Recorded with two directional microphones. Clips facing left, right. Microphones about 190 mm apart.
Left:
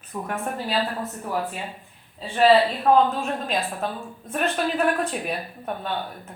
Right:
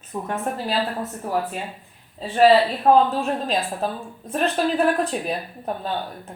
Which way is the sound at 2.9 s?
30° right (ahead or behind).